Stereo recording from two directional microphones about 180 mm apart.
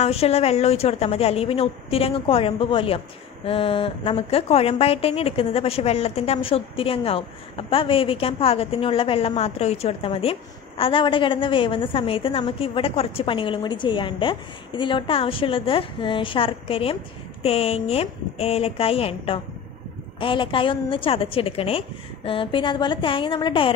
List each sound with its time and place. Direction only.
0.0 s a woman's voice: 35° left (ahead or behind)